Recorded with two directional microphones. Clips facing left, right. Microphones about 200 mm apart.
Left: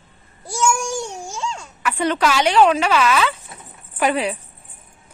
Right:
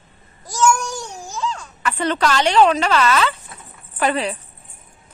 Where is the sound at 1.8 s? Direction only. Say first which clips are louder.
Left 1 dB; 10° left (ahead or behind).